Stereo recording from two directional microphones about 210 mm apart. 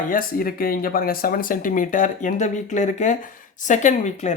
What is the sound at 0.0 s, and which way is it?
Speech, 40° left (ahead or behind).